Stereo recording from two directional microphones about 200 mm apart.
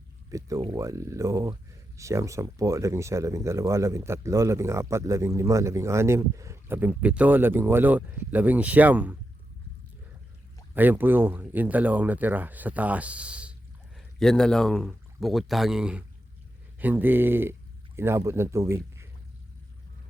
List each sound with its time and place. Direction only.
0.3 s speech: 15° right (ahead or behind)
10.8 s speech: 10° right (ahead or behind)